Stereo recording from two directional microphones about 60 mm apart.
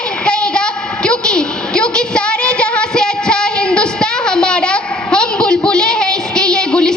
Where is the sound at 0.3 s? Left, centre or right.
Centre.